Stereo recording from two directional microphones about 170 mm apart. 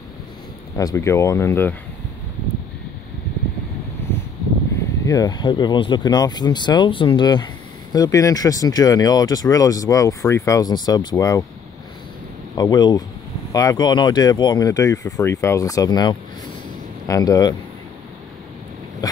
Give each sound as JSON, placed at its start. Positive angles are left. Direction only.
{"t": 0.7, "sound": "speech", "side_deg": 20}
{"t": 5.0, "sound": "speech", "side_deg": 20}
{"t": 12.5, "sound": "speech", "side_deg": 25}